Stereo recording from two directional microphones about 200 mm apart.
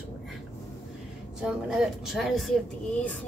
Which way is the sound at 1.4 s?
5° right (ahead or behind).